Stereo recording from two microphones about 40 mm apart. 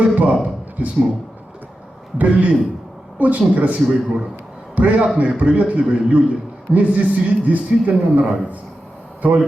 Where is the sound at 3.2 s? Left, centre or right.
Right.